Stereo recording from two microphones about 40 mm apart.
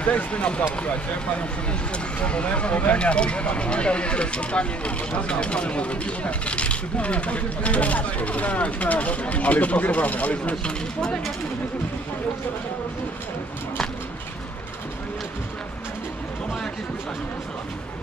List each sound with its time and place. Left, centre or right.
0.0 s speech: left
2.2 s speech: left